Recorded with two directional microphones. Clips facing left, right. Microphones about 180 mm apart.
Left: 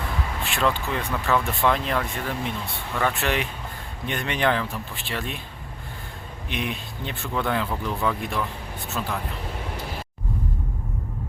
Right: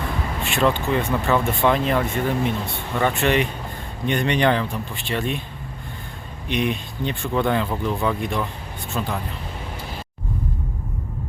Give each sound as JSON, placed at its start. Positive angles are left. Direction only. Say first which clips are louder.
{"t": 0.4, "sound": "speech", "louder": "right 5 dB", "side_deg": 0}
{"t": 6.5, "sound": "speech", "louder": "right 7 dB", "side_deg": 0}